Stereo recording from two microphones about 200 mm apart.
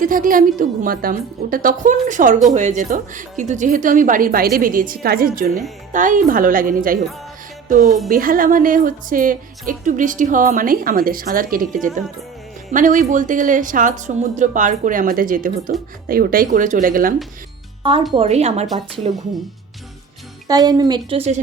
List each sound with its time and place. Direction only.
0.0 s a woman's voice: 45° right (ahead or behind)
8.1 s a woman's voice: 45° right (ahead or behind)
18.1 s speech: 30° right (ahead or behind)
20.5 s speech: 20° right (ahead or behind)